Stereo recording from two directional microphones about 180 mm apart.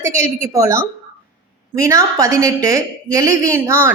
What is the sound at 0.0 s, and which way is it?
Speech, 15° right (ahead or behind).